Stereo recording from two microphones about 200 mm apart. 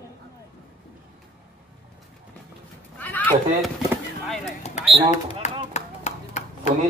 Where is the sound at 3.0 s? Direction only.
10° left (ahead or behind).